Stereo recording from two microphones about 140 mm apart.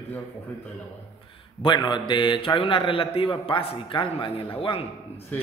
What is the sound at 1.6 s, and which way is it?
A man's voice, 35° left (ahead or behind).